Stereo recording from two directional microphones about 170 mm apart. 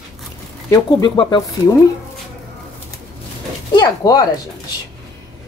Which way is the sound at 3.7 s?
25° left (ahead or behind).